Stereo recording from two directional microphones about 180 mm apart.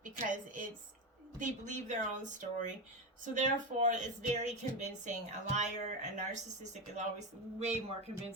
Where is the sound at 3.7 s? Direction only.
45° right (ahead or behind).